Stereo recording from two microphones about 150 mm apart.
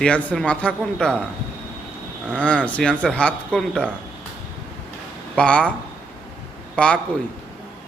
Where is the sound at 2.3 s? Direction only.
10° left (ahead or behind).